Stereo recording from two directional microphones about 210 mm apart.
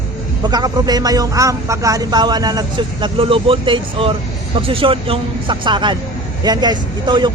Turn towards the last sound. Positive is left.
turn(degrees=-20)  # may be behind; listen again after turning